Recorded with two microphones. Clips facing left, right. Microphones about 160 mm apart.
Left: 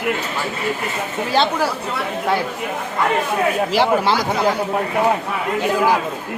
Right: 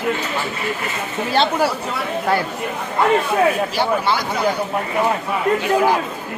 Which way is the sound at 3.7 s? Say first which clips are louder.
Left 3 dB; 90° left.